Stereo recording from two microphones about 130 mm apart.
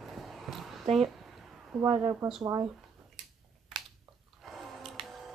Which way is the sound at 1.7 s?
Centre (ahead or behind).